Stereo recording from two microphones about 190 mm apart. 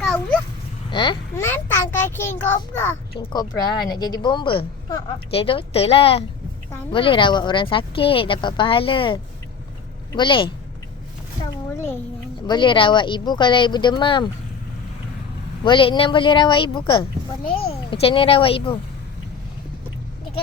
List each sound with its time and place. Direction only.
0.9 s a sound: 25° left (ahead or behind)
1.4 s a child's voice: 15° left (ahead or behind)
3.2 s a woman's voice: 20° left (ahead or behind)
11.5 s a sound: 15° left (ahead or behind)
12.5 s a woman's voice: 25° left (ahead or behind)
15.6 s a woman's voice: 25° left (ahead or behind)